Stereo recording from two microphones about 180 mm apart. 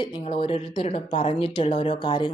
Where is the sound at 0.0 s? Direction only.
30° left (ahead or behind).